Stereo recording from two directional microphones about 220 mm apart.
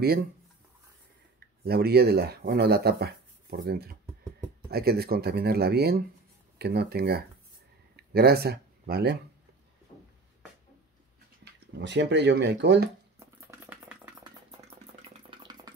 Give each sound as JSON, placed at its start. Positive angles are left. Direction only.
{"t": 1.6, "sound": "speech", "side_deg": -45}
{"t": 11.8, "sound": "speech", "side_deg": -55}
{"t": 13.2, "sound": "a sound", "side_deg": -10}
{"t": 15.2, "sound": "engine", "side_deg": -20}